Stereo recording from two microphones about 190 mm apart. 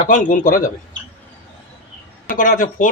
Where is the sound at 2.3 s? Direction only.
45° left (ahead or behind).